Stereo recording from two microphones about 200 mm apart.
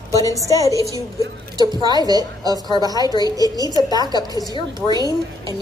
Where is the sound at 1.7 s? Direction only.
20° right (ahead or behind).